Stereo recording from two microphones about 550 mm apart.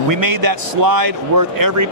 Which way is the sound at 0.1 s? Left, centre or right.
Right.